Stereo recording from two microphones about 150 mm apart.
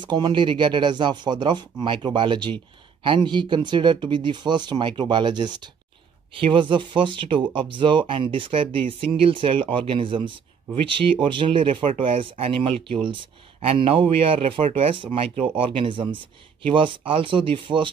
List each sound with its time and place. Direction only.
0.0 s speech: 30° right (ahead or behind)